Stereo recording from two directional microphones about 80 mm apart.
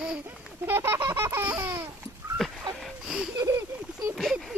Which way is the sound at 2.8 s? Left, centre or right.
Centre.